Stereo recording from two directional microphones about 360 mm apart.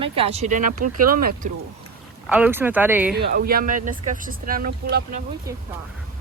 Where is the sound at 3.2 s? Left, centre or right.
Right.